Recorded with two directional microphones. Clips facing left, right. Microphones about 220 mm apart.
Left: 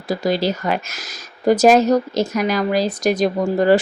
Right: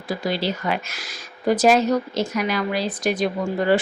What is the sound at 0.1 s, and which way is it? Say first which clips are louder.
Speech: left 5 dB; 40° left (ahead or behind).